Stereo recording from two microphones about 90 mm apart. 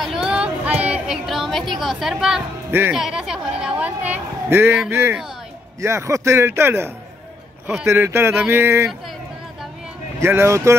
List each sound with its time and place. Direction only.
0.0 s female singing: 5° right (ahead or behind)
2.9 s a woman's voice: 5° right (ahead or behind); by 8.8 s 30° right (ahead or behind)
10.2 s speech: 30° right (ahead or behind)